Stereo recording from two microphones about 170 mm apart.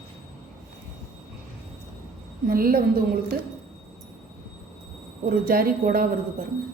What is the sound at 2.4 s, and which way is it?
Speech, 60° right (ahead or behind).